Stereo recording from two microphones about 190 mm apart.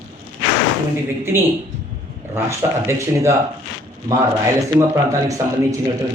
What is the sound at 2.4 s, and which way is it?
A man's voice, 15° right (ahead or behind).